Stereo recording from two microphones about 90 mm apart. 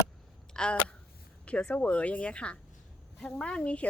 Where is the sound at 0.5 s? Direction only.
10° left (ahead or behind).